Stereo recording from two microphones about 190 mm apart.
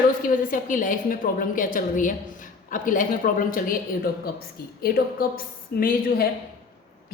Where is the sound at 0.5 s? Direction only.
45° left (ahead or behind).